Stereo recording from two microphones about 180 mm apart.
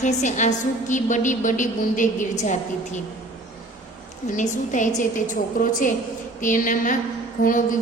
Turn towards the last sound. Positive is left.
turn(degrees=45)  # may be behind; listen again after turning